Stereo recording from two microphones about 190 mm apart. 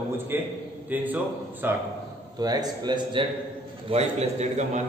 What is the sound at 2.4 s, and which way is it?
Speech, 20° right (ahead or behind).